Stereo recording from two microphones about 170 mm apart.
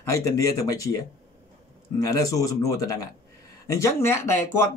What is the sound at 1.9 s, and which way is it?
Speech, 20° left (ahead or behind).